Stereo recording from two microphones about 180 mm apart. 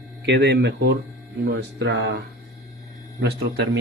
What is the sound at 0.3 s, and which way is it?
Speech, 70° right (ahead or behind).